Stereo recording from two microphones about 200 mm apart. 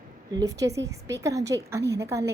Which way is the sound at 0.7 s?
15° right (ahead or behind).